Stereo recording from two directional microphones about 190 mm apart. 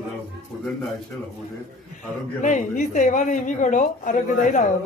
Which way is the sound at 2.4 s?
40° left (ahead or behind).